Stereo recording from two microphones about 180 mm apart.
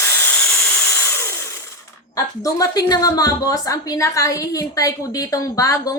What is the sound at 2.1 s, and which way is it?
A woman's voice, 20° left (ahead or behind).